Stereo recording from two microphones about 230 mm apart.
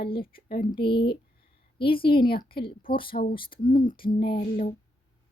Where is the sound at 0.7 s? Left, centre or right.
Left.